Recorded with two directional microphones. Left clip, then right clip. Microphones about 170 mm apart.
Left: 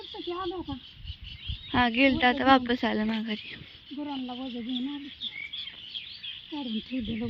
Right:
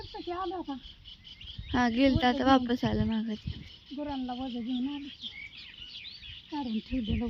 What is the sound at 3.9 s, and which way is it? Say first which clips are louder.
Speech: even; 25° right (ahead or behind).